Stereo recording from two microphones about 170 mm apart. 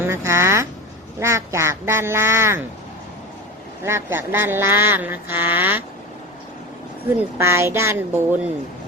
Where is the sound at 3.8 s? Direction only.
15° right (ahead or behind).